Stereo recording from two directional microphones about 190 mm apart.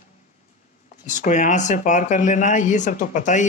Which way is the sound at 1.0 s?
40° left (ahead or behind).